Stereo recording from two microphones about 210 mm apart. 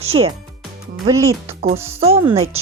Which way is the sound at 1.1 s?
15° right (ahead or behind).